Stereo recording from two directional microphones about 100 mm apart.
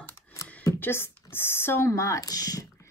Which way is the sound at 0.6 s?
30° left (ahead or behind).